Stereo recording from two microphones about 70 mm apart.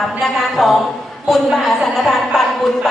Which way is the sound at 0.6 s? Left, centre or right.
Centre.